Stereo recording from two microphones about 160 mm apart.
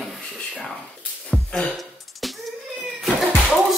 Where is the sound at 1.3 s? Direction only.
5° left (ahead or behind).